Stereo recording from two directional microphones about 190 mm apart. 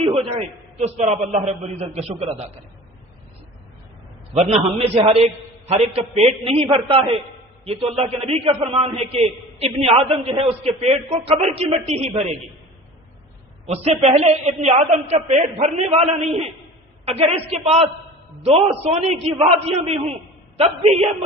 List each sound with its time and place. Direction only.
0.0 s a man's voice: 30° right (ahead or behind)
4.4 s a man's voice: 35° right (ahead or behind)
13.7 s a man's voice: 35° right (ahead or behind)